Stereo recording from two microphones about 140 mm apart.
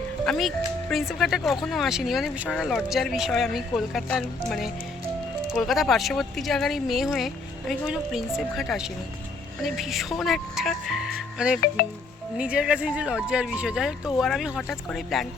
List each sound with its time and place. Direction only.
0.3 s speech: centre (ahead or behind)